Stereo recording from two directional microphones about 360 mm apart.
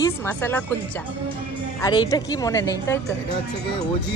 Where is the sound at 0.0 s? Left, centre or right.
Centre.